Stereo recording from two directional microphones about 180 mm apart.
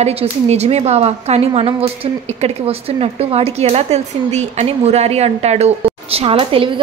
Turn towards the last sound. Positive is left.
turn(degrees=-30)  # may be behind; listen again after turning